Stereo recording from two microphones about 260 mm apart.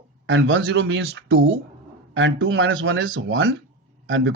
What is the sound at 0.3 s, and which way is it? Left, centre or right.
Speech, right.